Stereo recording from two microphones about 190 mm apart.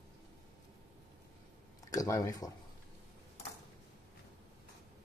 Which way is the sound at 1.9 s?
20° left (ahead or behind).